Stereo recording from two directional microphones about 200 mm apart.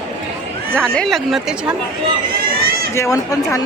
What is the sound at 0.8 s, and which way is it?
Speech, 5° left (ahead or behind).